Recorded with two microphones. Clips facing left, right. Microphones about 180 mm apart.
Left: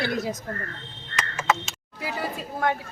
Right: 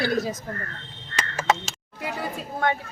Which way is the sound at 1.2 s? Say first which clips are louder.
Right 1 dB; 40° right (ahead or behind).